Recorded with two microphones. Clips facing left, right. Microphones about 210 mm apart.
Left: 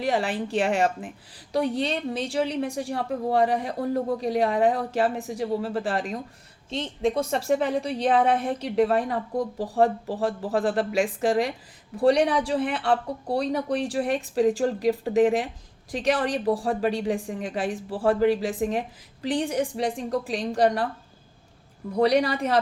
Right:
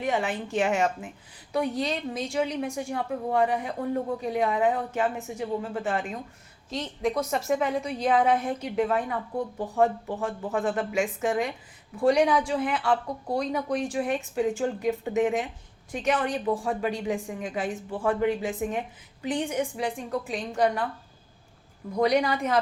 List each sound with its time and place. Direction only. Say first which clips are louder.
0.0 s a woman's voice: left 2 dB; 35° left (ahead or behind)
21.9 s a woman's voice: left 2 dB; 35° left (ahead or behind)